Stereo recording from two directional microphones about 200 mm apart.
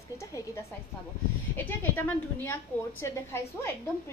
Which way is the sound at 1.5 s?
10° left (ahead or behind).